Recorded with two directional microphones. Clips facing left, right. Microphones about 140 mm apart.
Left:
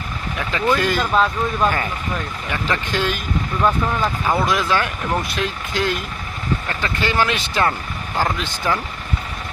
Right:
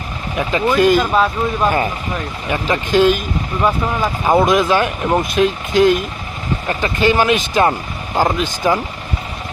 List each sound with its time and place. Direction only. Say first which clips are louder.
0.3 s speech: right 5 dB; 20° right (ahead or behind)
2.5 s speech: right 7 dB; 20° right (ahead or behind)
4.2 s speech: right 10 dB; 25° right (ahead or behind)